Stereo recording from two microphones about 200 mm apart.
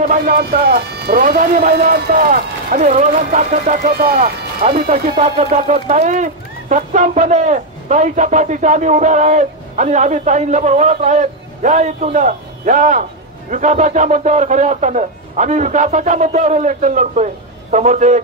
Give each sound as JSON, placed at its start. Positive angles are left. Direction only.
{"t": 0.0, "sound": "speech", "side_deg": -45}